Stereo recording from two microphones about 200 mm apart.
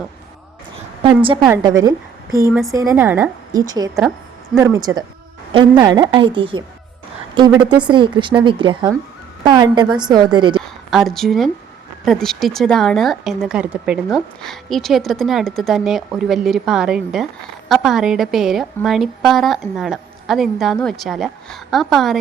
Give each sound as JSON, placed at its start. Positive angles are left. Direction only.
{"t": 1.0, "sound": "a woman's voice", "side_deg": -25}
{"t": 2.5, "sound": "speech", "side_deg": 0}
{"t": 2.7, "sound": "a woman's voice", "side_deg": -15}
{"t": 10.6, "sound": "speech", "side_deg": 0}